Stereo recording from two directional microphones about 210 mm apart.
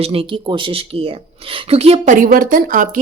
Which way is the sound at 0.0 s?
25° right (ahead or behind).